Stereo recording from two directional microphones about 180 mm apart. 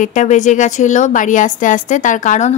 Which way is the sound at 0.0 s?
45° left (ahead or behind).